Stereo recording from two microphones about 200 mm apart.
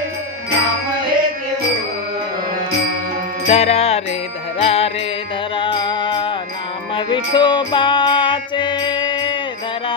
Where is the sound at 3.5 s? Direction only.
30° left (ahead or behind).